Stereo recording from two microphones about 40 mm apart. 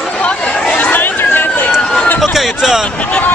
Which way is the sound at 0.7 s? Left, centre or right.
Left.